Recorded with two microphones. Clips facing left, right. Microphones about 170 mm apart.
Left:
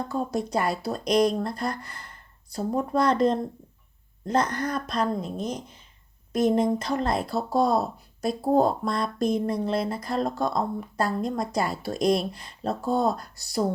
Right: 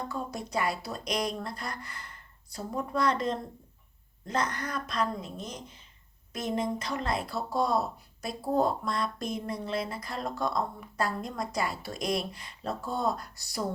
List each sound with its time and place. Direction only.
0.1 s speech: 35° left (ahead or behind)